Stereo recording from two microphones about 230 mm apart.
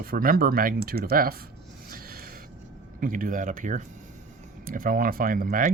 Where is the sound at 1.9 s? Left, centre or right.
Right.